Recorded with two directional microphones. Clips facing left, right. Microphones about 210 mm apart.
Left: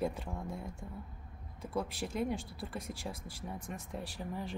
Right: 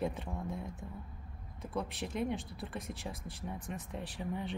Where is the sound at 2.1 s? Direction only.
5° left (ahead or behind).